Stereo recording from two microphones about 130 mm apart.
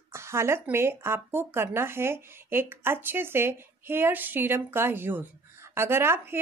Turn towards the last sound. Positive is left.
turn(degrees=-20)  # may be behind; listen again after turning